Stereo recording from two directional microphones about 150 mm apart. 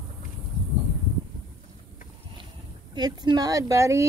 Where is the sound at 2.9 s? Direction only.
25° right (ahead or behind).